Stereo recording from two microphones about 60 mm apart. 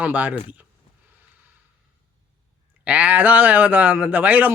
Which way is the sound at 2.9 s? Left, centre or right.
Right.